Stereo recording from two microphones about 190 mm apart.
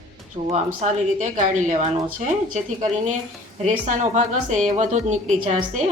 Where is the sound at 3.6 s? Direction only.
40° right (ahead or behind).